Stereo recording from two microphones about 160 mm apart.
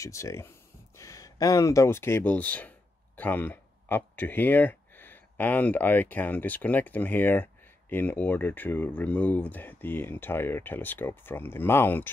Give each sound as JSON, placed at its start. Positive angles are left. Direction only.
{"t": 0.0, "sound": "speech", "side_deg": 20}